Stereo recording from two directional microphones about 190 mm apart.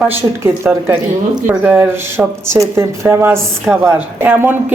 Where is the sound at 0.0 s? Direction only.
10° right (ahead or behind).